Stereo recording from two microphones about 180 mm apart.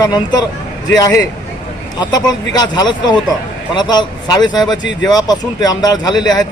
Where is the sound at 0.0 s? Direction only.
20° left (ahead or behind).